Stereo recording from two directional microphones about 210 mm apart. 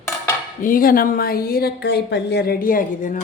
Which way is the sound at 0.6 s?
40° left (ahead or behind).